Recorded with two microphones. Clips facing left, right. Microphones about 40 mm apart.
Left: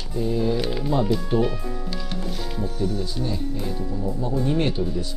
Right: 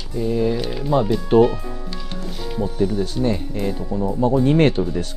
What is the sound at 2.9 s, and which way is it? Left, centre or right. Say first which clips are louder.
Speech: right 5 dB; centre.